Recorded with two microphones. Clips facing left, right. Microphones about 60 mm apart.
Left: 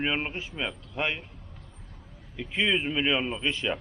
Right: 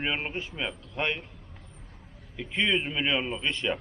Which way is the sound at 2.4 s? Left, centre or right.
Centre.